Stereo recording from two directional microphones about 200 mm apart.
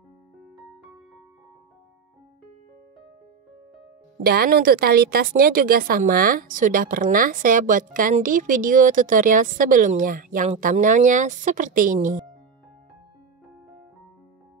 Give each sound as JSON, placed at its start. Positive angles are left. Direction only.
{"t": 4.2, "sound": "speech", "side_deg": -50}